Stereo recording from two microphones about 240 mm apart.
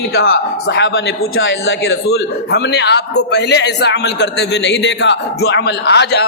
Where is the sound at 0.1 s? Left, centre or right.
Left.